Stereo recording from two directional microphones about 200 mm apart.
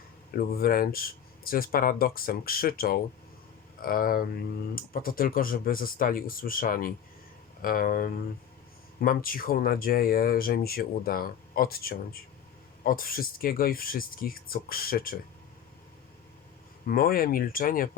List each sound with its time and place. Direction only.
0.3 s speech: 45° left (ahead or behind)
16.8 s speech: 45° left (ahead or behind)